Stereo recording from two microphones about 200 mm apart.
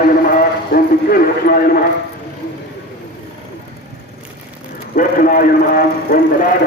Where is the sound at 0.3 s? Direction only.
45° left (ahead or behind).